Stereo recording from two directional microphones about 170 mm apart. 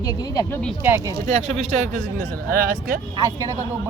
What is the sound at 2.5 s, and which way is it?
Speech, 60° right (ahead or behind).